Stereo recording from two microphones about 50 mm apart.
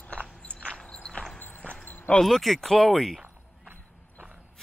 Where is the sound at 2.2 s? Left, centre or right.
Centre.